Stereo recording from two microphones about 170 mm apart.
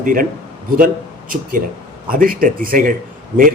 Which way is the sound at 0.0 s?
55° right (ahead or behind).